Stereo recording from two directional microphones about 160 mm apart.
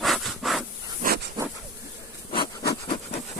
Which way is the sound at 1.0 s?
60° right (ahead or behind).